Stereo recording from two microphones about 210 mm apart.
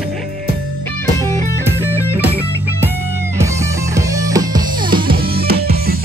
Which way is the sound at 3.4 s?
15° right (ahead or behind).